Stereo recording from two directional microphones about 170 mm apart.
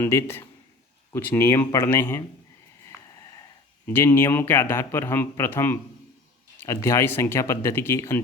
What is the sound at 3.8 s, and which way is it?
Speech, 15° left (ahead or behind).